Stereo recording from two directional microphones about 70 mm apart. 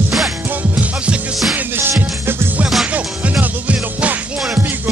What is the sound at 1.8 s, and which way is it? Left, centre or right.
Music, right.